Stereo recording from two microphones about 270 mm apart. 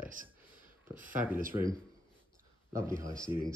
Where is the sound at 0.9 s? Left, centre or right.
Right.